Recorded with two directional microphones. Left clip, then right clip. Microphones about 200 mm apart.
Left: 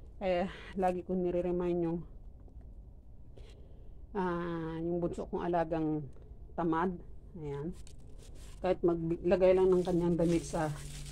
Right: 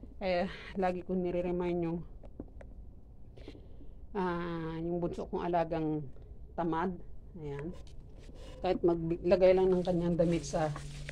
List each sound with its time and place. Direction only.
0.2 s speech: 10° left (ahead or behind)
4.1 s speech: 15° left (ahead or behind)
8.5 s speech: 15° left (ahead or behind)